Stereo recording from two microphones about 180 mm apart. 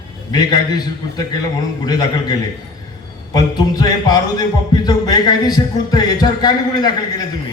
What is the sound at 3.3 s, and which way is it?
A man's voice, 20° left (ahead or behind).